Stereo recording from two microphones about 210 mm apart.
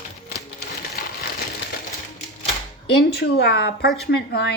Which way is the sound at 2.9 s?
50° left (ahead or behind).